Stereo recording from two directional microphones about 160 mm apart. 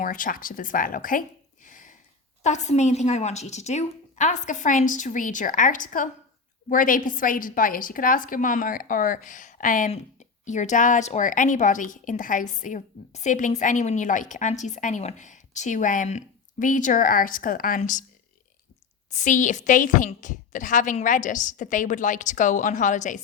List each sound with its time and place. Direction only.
0.0 s a woman's voice: 60° left (ahead or behind)
1.6 s a sound: 55° left (ahead or behind)
2.4 s a woman's voice: 45° left (ahead or behind)
19.1 s a woman's voice: 50° left (ahead or behind)